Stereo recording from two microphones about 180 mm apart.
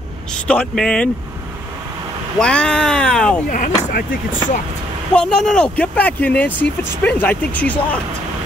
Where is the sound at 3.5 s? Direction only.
45° left (ahead or behind).